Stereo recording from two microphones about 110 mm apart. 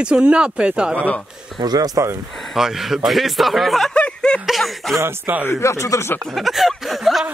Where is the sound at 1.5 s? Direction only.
35° right (ahead or behind).